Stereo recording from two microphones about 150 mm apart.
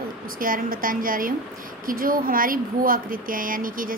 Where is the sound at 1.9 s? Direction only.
70° right (ahead or behind).